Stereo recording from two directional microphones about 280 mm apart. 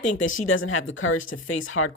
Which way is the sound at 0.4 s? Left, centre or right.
Left.